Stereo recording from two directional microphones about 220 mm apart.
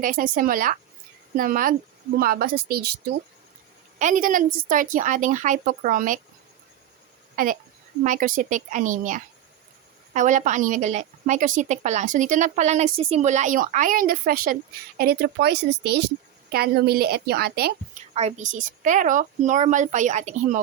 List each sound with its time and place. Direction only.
0.0 s a woman's voice: 40° right (ahead or behind)
3.9 s a woman's voice: 35° right (ahead or behind)
7.3 s a woman's voice: 35° right (ahead or behind)
18.1 s a woman's voice: 30° right (ahead or behind)